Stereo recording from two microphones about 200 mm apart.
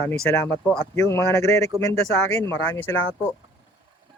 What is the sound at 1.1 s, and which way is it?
Speech, 15° left (ahead or behind).